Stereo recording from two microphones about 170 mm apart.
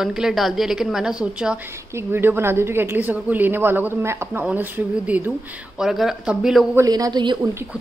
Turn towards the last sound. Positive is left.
turn(degrees=-25)  # may be behind; listen again after turning